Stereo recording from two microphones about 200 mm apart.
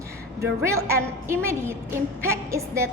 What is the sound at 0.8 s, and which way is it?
A woman's voice, 15° right (ahead or behind).